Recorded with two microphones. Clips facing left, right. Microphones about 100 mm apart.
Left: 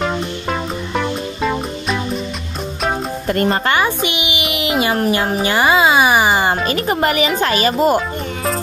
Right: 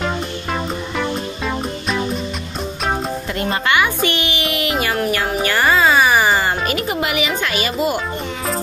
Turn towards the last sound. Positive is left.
turn(degrees=40)  # may be behind; listen again after turning